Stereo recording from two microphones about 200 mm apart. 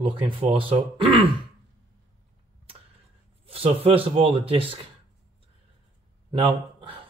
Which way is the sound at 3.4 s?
30° right (ahead or behind).